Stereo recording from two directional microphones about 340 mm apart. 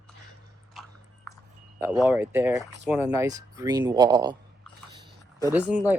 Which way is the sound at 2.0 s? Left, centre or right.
Centre.